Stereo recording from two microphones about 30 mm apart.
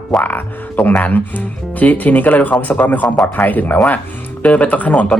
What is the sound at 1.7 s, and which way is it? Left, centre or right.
Speech, left.